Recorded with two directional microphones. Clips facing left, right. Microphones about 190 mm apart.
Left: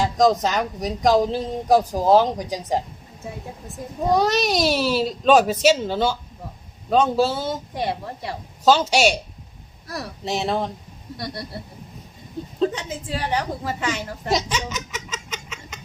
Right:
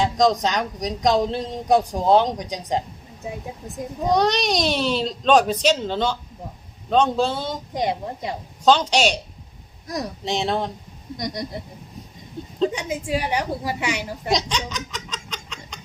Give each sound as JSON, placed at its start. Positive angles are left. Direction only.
{"t": 0.0, "sound": "a sound", "side_deg": 5}
{"t": 0.4, "sound": "speech", "side_deg": 5}
{"t": 4.0, "sound": "speech", "side_deg": 5}
{"t": 7.7, "sound": "a woman's voice", "side_deg": -20}
{"t": 8.6, "sound": "speech", "side_deg": 5}
{"t": 9.8, "sound": "speech", "side_deg": -20}
{"t": 10.2, "sound": "speech", "side_deg": 5}
{"t": 11.2, "sound": "a woman's voice", "side_deg": -20}
{"t": 12.6, "sound": "a woman's voice", "side_deg": -15}
{"t": 14.3, "sound": "laughter", "side_deg": 5}